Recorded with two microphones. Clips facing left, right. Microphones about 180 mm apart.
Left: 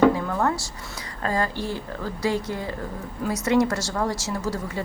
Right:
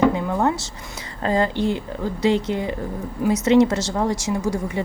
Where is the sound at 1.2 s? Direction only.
20° right (ahead or behind).